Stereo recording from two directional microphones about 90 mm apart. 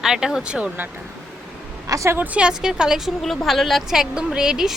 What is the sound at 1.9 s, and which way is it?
Speech, 35° right (ahead or behind).